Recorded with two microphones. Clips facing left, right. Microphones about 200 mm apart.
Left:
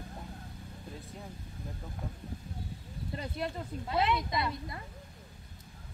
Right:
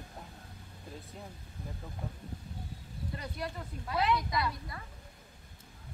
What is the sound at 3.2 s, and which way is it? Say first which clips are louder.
Speech: left 5 dB; 25° left (ahead or behind).